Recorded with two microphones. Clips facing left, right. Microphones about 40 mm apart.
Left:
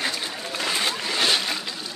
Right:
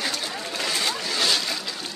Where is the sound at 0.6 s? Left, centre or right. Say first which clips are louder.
Left 1 dB; left.